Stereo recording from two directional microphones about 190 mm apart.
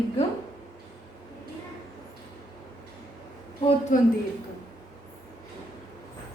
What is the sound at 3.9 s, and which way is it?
Speech, 40° left (ahead or behind).